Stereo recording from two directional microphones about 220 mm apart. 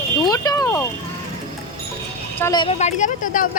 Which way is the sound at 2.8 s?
35° left (ahead or behind).